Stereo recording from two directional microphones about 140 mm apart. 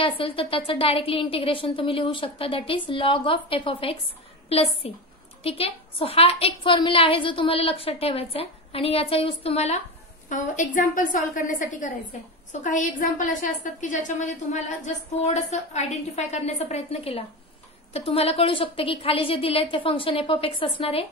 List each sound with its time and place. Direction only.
0.2 s a woman's voice: 40° left (ahead or behind)
10.3 s a woman's voice: 65° left (ahead or behind); by 21.1 s 40° left (ahead or behind)